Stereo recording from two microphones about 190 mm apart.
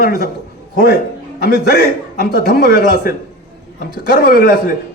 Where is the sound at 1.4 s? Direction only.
60° left (ahead or behind).